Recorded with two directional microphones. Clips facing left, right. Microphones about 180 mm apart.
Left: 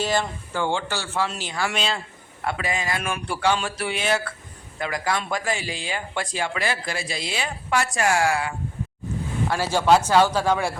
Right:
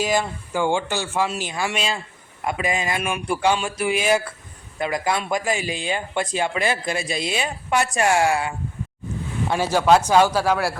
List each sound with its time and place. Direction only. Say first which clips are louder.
0.0 s speech: right 2 dB; 10° right (ahead or behind)
4.8 s speech: right 3 dB; 20° right (ahead or behind); by 10.8 s 5° right (ahead or behind)